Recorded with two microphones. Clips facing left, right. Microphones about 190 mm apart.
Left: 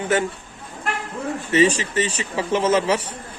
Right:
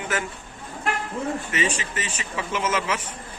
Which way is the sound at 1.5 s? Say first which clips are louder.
Left 9 dB; 35° left (ahead or behind).